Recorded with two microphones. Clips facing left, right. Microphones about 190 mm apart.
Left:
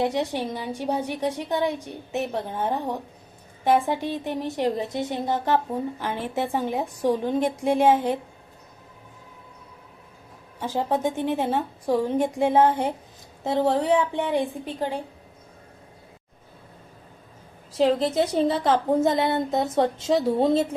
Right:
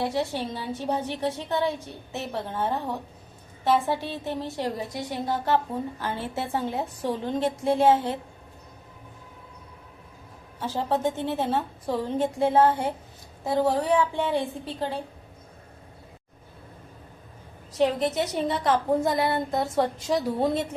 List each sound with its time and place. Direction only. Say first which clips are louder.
0.0 s a woman's voice: left 3 dB; 20° left (ahead or behind)
10.6 s a woman's voice: left 1 dB; 15° left (ahead or behind)
17.8 s a woman's voice: left 4 dB; 30° left (ahead or behind)